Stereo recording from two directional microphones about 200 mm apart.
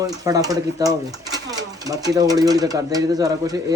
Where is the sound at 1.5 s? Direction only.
20° right (ahead or behind).